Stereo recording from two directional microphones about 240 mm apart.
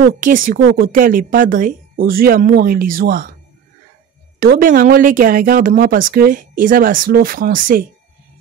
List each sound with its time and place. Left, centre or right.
0.0 s speech: right
4.4 s speech: right